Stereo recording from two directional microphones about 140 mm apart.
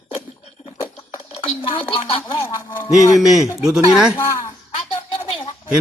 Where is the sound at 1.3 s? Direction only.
40° left (ahead or behind).